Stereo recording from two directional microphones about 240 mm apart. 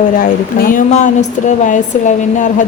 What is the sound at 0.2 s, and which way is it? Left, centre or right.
A woman's voice, left.